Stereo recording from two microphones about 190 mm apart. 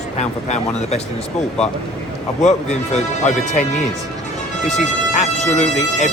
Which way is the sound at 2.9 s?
35° left (ahead or behind).